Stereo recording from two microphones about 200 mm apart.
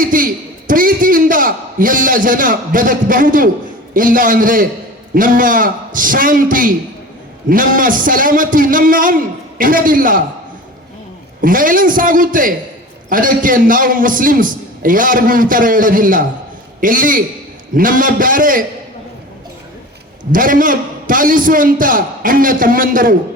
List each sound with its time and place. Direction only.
0.0 s a man's voice: 45° right (ahead or behind)
11.3 s a man's voice: 45° right (ahead or behind)
20.3 s a man's voice: 45° right (ahead or behind)